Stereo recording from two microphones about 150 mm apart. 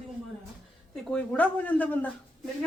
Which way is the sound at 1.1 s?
10° left (ahead or behind).